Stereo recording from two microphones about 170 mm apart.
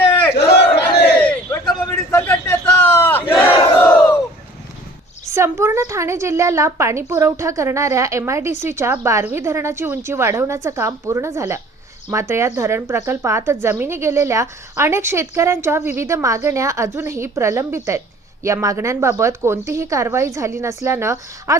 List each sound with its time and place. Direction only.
0.1 s battle cry: 20° left (ahead or behind)
1.2 s a sound: 10° left (ahead or behind)
5.3 s a woman's voice: 15° right (ahead or behind)